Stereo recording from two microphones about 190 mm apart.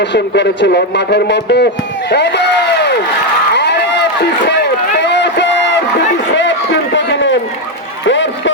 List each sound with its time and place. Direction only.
0.0 s a man's voice: 65° left (ahead or behind)
3.5 s run: 65° left (ahead or behind)
6.9 s run: 70° left (ahead or behind)
8.0 s a sound: 70° left (ahead or behind)